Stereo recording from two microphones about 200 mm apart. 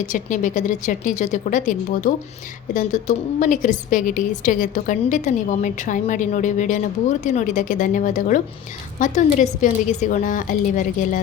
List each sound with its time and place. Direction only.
0.0 s a woman's voice: 40° left (ahead or behind)